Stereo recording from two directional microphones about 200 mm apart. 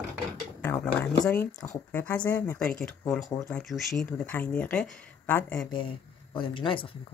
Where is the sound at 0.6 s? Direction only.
10° left (ahead or behind).